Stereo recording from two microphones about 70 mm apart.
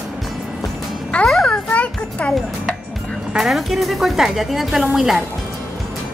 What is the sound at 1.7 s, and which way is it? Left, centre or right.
Music, centre.